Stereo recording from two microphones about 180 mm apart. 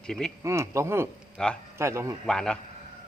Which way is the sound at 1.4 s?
5° left (ahead or behind).